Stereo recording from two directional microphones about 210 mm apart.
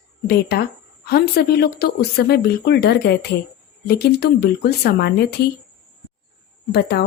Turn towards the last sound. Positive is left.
turn(degrees=50)  # may be behind; listen again after turning